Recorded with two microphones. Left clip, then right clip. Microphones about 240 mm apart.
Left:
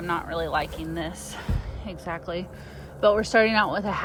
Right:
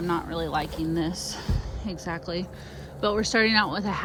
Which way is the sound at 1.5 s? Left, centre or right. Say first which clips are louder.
Right 1 dB; centre.